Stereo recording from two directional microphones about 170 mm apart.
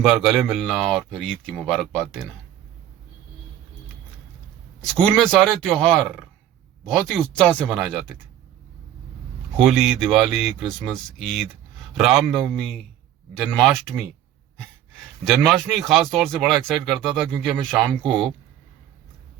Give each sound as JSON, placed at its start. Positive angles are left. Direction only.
{"t": 0.0, "sound": "speech", "side_deg": -5}
{"t": 5.0, "sound": "speech", "side_deg": 5}
{"t": 9.6, "sound": "speech", "side_deg": 0}
{"t": 15.2, "sound": "speech", "side_deg": 0}